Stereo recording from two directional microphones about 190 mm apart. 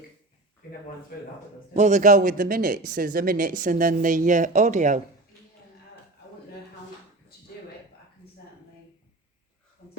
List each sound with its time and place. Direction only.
1.7 s speech: 40° right (ahead or behind)